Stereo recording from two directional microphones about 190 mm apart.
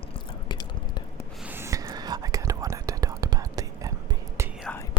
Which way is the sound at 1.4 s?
10° right (ahead or behind).